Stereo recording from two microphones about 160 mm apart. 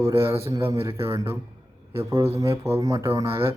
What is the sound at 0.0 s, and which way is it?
A man's voice, 15° right (ahead or behind).